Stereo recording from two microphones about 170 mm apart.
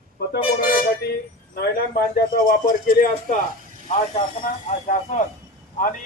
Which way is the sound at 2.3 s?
55° left (ahead or behind).